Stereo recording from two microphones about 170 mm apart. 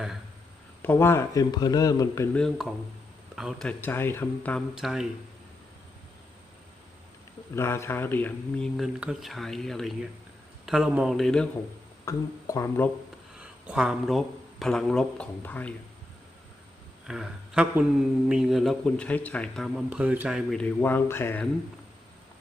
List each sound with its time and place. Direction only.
0.8 s a man's voice: 15° left (ahead or behind)
2.3 s speech: centre (ahead or behind)
4.7 s speech: 5° right (ahead or behind)
7.5 s speech: 15° left (ahead or behind)
12.0 s speech: 20° left (ahead or behind)
13.4 s speech: 5° right (ahead or behind)
17.1 s speech: 5° right (ahead or behind)
19.9 s speech: 10° right (ahead or behind); by 21.5 s 10° left (ahead or behind)